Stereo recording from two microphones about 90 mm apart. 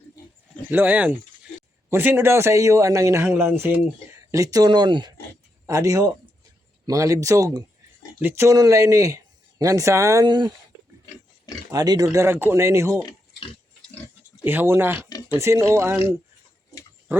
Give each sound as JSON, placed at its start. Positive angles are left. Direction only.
{"t": 0.7, "sound": "a man's voice", "side_deg": -20}
{"t": 4.3, "sound": "speech", "side_deg": -40}
{"t": 5.6, "sound": "a man's voice", "side_deg": -40}
{"t": 8.2, "sound": "speech", "side_deg": -25}
{"t": 8.4, "sound": "speech", "side_deg": -40}
{"t": 10.2, "sound": "speech", "side_deg": -55}
{"t": 11.7, "sound": "speech", "side_deg": -45}
{"t": 12.2, "sound": "speech", "side_deg": -25}
{"t": 14.4, "sound": "a man's voice", "side_deg": -25}